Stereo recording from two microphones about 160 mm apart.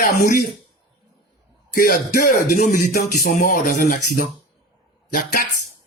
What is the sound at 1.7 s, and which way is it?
Speech, 65° left (ahead or behind).